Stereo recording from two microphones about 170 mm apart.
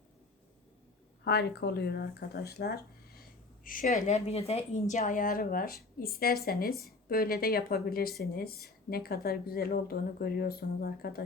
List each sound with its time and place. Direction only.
1.2 s speech: 75° left (ahead or behind); by 3.9 s 55° left (ahead or behind)
4.0 s a woman's voice: 40° left (ahead or behind); by 11.2 s 65° left (ahead or behind)